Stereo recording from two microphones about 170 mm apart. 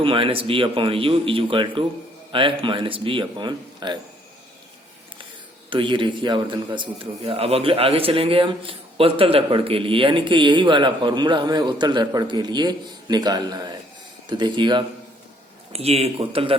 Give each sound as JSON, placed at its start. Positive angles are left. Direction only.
{"t": 0.0, "sound": "a man's voice", "side_deg": -30}
{"t": 5.7, "sound": "a man's voice", "side_deg": -30}